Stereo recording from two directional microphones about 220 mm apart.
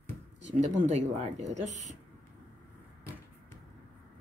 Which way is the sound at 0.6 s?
30° right (ahead or behind).